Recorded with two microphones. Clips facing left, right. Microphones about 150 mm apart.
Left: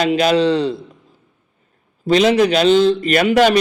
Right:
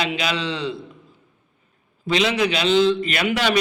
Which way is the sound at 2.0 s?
40° left (ahead or behind).